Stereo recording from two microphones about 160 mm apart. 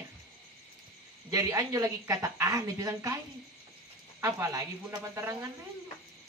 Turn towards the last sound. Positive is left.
turn(degrees=-20)  # may be behind; listen again after turning